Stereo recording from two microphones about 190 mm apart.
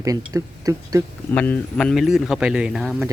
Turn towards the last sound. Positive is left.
turn(degrees=0)  # may be behind; listen again after turning